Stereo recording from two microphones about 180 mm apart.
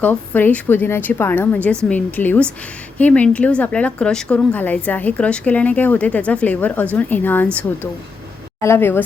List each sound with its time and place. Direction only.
0.0 s a woman's voice: 10° left (ahead or behind)